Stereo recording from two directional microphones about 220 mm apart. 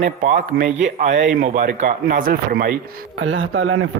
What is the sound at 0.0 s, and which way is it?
Speech, 35° right (ahead or behind).